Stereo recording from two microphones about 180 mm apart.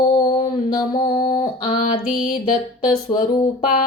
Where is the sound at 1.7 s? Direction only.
40° left (ahead or behind).